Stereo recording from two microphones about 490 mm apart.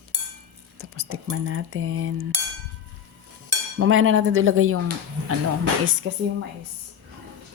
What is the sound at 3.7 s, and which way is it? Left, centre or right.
Cutlery, right.